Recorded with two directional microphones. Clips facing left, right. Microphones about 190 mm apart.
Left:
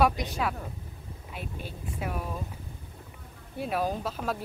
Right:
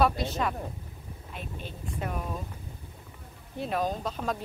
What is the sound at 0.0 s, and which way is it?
Speech, 15° left (ahead or behind).